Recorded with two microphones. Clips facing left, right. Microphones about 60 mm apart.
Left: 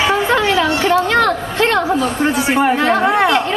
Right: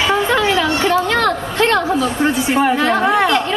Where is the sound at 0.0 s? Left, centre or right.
Left.